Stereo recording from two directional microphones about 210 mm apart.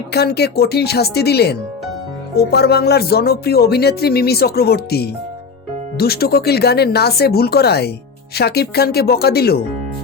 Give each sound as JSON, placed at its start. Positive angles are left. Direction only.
{"t": 0.1, "sound": "speech", "side_deg": 50}